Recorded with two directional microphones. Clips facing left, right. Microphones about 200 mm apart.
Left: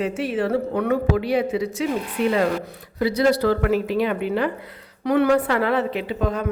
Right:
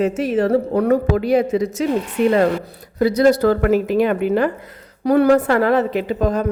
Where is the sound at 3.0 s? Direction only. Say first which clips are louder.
Right 5 dB; 45° right (ahead or behind).